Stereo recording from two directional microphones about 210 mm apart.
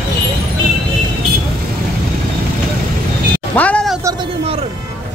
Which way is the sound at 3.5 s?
5° left (ahead or behind).